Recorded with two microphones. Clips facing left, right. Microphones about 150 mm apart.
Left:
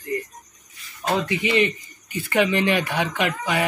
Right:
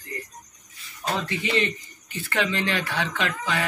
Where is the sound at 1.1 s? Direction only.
15° left (ahead or behind).